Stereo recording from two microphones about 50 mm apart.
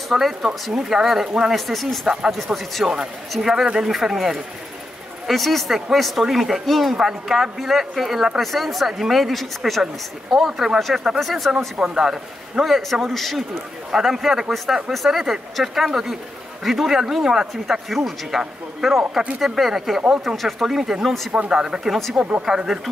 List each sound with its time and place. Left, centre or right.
0.1 s speech: centre
10.3 s speech: centre
11.7 s speech: centre
21.5 s speech: centre
22.2 s speech: centre